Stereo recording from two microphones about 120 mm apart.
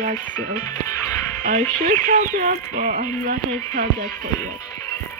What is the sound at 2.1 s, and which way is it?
Speech, 90° right.